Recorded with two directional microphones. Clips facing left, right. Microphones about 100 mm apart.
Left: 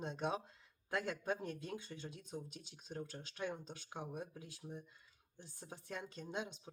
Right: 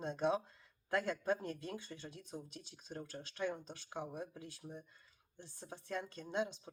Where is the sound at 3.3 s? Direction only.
15° left (ahead or behind).